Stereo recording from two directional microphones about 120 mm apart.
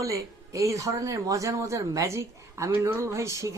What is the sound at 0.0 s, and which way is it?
Speech, 25° right (ahead or behind).